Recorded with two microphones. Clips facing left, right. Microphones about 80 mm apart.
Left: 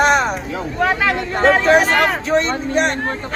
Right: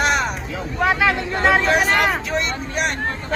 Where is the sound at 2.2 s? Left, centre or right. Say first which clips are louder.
Left 6 dB; left.